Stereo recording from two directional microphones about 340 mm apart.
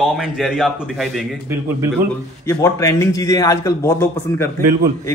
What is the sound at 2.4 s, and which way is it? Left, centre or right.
A man's voice, centre.